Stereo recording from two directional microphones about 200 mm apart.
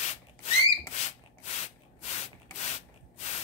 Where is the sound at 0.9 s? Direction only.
35° left (ahead or behind).